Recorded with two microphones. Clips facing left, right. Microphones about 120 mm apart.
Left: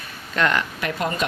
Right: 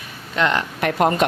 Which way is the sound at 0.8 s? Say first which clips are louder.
Right 7 dB; 55° right (ahead or behind).